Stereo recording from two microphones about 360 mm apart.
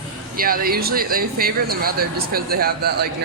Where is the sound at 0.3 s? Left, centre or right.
Right.